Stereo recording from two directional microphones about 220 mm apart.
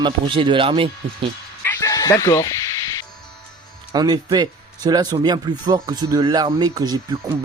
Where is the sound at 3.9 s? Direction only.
20° right (ahead or behind).